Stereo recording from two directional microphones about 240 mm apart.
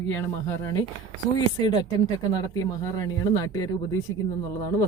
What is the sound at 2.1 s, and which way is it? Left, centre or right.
Speech, centre.